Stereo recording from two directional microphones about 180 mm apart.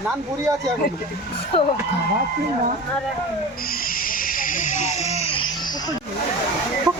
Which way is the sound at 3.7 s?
55° left (ahead or behind).